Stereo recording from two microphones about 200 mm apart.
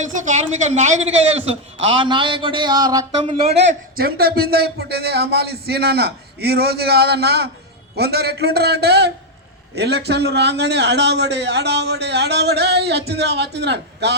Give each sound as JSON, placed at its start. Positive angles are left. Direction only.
{"t": 0.0, "sound": "a woman's voice", "side_deg": -35}
{"t": 3.6, "sound": "a man's voice", "side_deg": -55}